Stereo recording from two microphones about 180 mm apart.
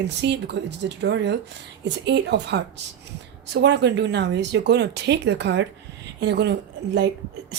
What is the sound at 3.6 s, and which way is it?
A woman's voice, 70° right (ahead or behind).